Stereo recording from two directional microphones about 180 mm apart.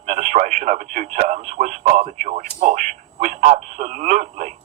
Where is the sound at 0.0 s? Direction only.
35° right (ahead or behind).